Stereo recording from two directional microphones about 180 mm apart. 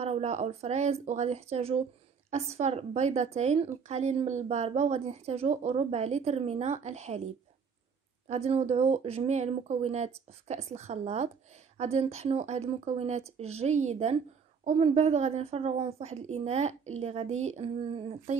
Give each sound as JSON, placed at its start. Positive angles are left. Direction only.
{"t": 0.0, "sound": "a woman's voice", "side_deg": -35}
{"t": 8.3, "sound": "a woman's voice", "side_deg": -35}